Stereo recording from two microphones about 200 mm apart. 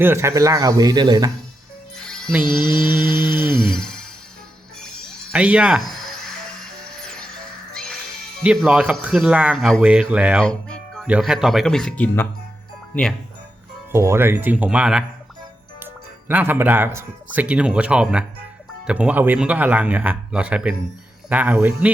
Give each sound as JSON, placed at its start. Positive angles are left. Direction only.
{"t": 0.0, "sound": "speech", "side_deg": -15}
{"t": 2.0, "sound": "music", "side_deg": 5}
{"t": 2.6, "sound": "mantra", "side_deg": -45}
{"t": 3.1, "sound": "music", "side_deg": 20}
{"t": 3.7, "sound": "music", "side_deg": 5}
{"t": 5.3, "sound": "a sound", "side_deg": -5}
{"t": 6.9, "sound": "music", "side_deg": 5}
{"t": 8.4, "sound": "speech", "side_deg": -5}
{"t": 13.9, "sound": "speech", "side_deg": -15}
{"t": 16.3, "sound": "speech", "side_deg": -10}